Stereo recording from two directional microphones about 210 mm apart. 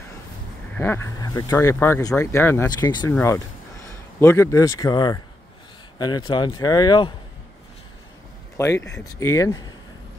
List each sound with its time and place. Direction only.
0.7 s speech: 10° left (ahead or behind)
4.2 s speech: 10° left (ahead or behind)
8.6 s speech: 15° left (ahead or behind)